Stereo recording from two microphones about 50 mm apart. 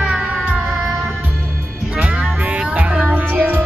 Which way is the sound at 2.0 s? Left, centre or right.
Right.